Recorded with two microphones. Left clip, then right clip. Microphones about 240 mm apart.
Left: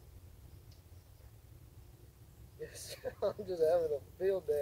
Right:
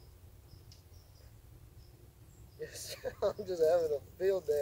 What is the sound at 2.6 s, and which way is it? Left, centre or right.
Speech, centre.